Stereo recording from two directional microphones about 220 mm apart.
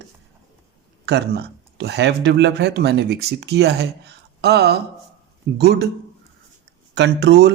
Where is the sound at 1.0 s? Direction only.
45° right (ahead or behind).